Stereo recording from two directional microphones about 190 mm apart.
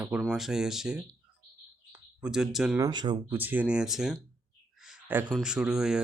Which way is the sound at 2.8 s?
20° right (ahead or behind).